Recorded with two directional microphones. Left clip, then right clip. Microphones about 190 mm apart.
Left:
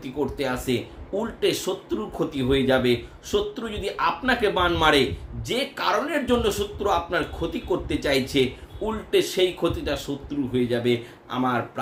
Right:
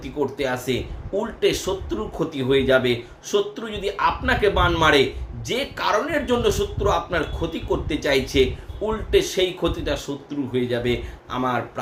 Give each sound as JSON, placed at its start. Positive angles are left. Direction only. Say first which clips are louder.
{"t": 0.0, "sound": "speech", "louder": "right 2 dB", "side_deg": 5}